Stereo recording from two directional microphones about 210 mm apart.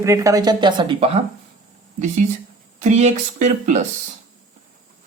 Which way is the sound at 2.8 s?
35° right (ahead or behind).